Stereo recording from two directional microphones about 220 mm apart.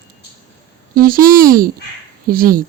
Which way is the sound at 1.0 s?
40° right (ahead or behind).